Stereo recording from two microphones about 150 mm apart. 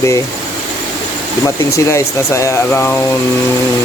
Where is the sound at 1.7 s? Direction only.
20° left (ahead or behind).